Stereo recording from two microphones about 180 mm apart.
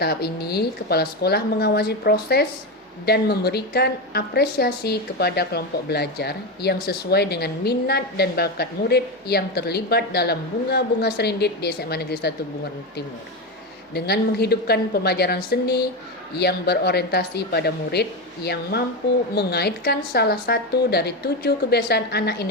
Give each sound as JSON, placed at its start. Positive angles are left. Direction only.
{"t": 0.0, "sound": "a woman's voice", "side_deg": 65}
{"t": 13.9, "sound": "a woman's voice", "side_deg": 65}
{"t": 19.3, "sound": "a woman's voice", "side_deg": 65}